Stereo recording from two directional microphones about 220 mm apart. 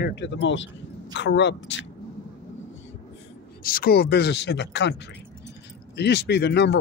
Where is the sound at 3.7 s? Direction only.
40° left (ahead or behind).